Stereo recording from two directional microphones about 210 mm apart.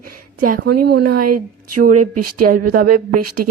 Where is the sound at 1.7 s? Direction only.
40° right (ahead or behind).